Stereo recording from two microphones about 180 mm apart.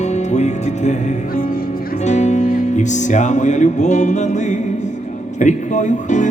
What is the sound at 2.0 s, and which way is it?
Music, 40° left (ahead or behind).